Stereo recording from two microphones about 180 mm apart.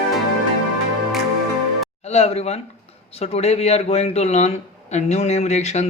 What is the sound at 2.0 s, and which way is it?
Speech, 35° left (ahead or behind).